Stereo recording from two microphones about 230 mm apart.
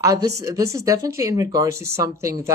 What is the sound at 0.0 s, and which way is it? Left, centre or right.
Speech, centre.